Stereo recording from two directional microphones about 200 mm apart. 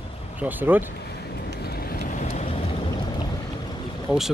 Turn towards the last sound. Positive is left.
turn(degrees=-5)  # may be behind; listen again after turning